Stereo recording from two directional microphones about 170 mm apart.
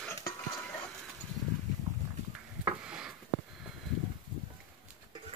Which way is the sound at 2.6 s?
5° right (ahead or behind).